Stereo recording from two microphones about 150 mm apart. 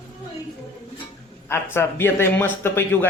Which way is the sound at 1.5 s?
15° left (ahead or behind).